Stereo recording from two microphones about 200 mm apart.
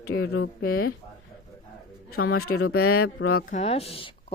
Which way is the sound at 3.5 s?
30° left (ahead or behind).